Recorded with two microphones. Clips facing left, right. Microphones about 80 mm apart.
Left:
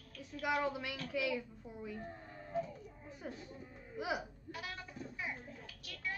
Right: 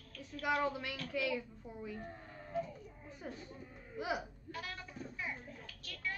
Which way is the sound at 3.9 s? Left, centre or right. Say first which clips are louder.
Even; centre.